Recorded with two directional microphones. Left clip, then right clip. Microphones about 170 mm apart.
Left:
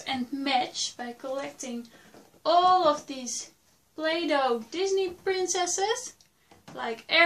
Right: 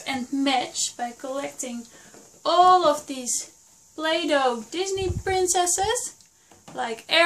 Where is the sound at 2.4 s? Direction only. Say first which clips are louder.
Right 4 dB; 45° right (ahead or behind).